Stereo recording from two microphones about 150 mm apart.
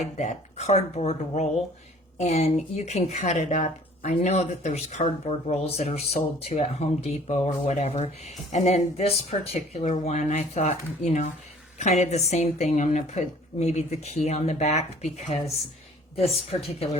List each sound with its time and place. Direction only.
0.2 s a woman's voice: 50° left (ahead or behind)